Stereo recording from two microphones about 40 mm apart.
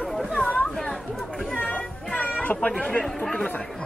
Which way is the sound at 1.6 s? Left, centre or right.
Left.